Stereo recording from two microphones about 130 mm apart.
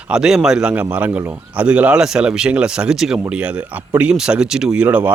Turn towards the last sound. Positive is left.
turn(degrees=-10)  # may be behind; listen again after turning